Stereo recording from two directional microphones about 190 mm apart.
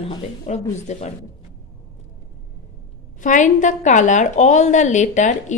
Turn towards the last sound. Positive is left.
turn(degrees=40)  # may be behind; listen again after turning